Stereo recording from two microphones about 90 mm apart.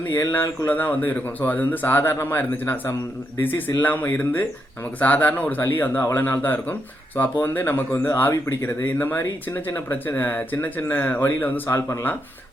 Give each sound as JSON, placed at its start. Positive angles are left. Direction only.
{"t": 0.1, "sound": "speech", "side_deg": 25}